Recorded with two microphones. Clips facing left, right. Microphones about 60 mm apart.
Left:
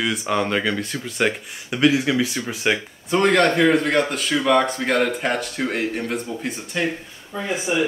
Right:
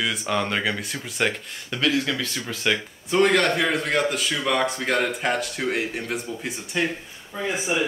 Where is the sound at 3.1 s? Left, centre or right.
Centre.